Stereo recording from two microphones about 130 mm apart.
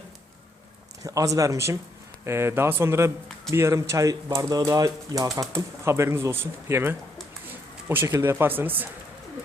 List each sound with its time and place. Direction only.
1.0 s speech: 25° right (ahead or behind)